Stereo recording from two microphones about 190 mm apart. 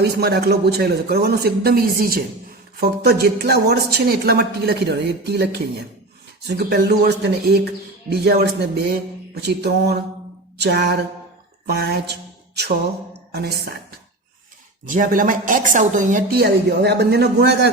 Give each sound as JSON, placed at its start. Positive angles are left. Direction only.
{"t": 0.0, "sound": "speech", "side_deg": -55}
{"t": 13.3, "sound": "speech", "side_deg": -55}
{"t": 14.8, "sound": "a woman's voice", "side_deg": -45}